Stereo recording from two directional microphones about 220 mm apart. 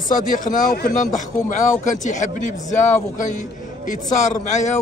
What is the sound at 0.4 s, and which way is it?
Speech, 35° left (ahead or behind).